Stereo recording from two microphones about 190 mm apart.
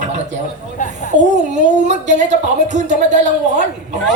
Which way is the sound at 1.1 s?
40° right (ahead or behind).